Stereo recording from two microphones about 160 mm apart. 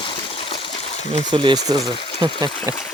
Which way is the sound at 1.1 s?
30° right (ahead or behind).